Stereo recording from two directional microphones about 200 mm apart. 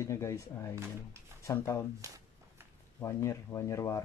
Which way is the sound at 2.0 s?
15° right (ahead or behind).